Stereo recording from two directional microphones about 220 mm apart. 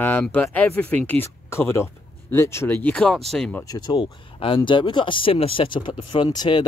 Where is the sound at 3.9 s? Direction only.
25° left (ahead or behind).